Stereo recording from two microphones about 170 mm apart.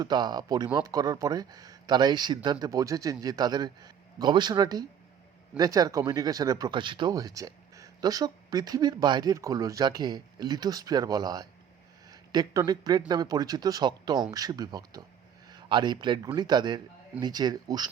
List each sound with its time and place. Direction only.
0.0 s speech: 25° right (ahead or behind)